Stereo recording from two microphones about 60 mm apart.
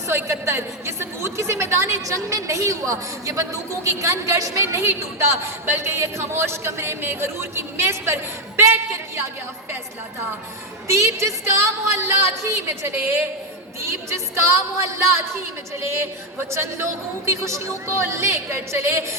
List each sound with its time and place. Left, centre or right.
0.1 s a woman's voice: right
10.8 s a woman's voice: right